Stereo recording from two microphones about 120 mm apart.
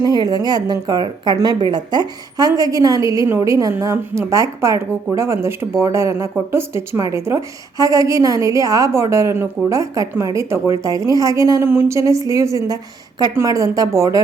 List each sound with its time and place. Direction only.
0.0 s a woman's voice: 35° right (ahead or behind)